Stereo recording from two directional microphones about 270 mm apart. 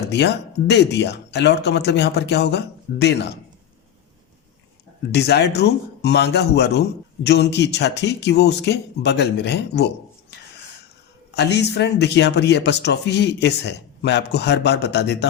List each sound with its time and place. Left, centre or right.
0.1 s speech: left
5.1 s speech: left
11.3 s speech: left